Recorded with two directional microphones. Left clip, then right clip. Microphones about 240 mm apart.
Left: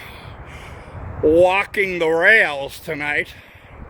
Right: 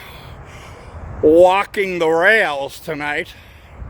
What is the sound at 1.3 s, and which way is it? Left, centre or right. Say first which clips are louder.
Speech: right 3 dB; right.